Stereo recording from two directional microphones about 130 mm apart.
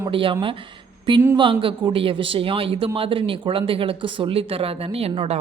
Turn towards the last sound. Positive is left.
turn(degrees=-50)  # may be behind; listen again after turning